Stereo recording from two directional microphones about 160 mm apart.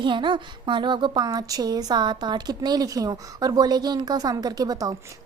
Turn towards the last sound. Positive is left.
turn(degrees=-20)  # may be behind; listen again after turning